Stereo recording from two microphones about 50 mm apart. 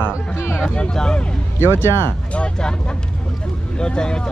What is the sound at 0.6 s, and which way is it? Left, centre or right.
Speech, centre.